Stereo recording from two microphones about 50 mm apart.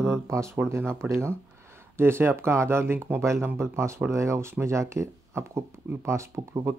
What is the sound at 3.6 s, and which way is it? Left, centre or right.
Speech, right.